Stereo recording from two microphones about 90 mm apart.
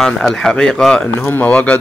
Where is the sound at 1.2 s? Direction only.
20° left (ahead or behind).